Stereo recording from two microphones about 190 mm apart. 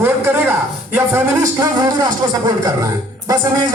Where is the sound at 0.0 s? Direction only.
10° right (ahead or behind).